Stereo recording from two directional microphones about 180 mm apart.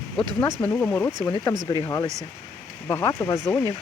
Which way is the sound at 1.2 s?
25° left (ahead or behind).